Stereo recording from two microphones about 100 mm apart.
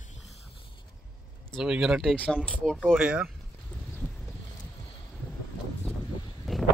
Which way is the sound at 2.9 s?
10° right (ahead or behind).